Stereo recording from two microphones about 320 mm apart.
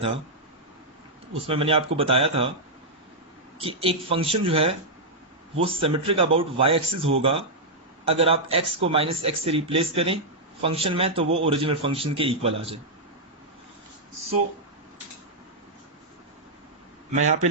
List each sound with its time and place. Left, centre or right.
1.5 s speech: centre
3.6 s speech: centre
17.1 s a man's voice: right